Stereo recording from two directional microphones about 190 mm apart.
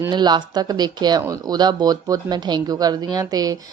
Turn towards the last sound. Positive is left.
turn(degrees=-20)  # may be behind; listen again after turning